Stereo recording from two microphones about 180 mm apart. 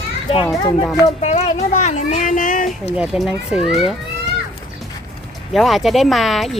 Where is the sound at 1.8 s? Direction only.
40° left (ahead or behind).